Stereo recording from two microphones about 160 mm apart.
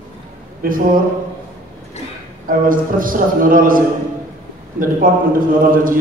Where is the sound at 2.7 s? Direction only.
60° right (ahead or behind).